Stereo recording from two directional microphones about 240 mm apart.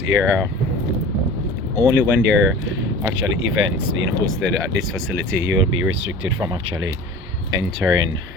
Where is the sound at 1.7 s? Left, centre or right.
Centre.